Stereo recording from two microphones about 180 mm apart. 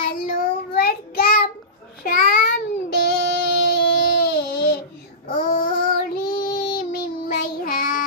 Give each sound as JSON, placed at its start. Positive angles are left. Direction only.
{"t": 0.0, "sound": "child singing", "side_deg": 55}
{"t": 5.3, "sound": "child singing", "side_deg": 50}